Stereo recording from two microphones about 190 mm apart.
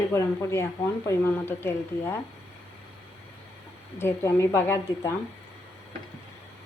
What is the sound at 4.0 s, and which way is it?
Speech, 15° left (ahead or behind).